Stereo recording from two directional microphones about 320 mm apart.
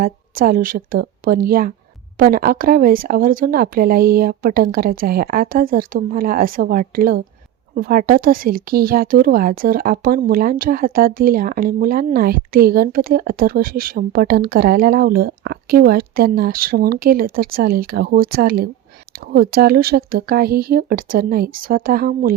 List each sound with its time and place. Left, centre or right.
0.0 s speech: right